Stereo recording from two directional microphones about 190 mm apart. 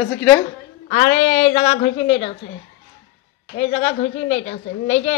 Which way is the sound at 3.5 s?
35° left (ahead or behind).